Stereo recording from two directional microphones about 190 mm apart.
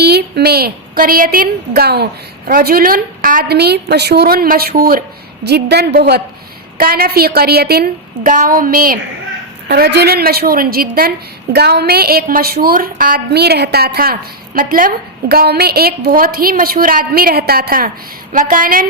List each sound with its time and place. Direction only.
0.0 s a woman's voice: 60° right (ahead or behind)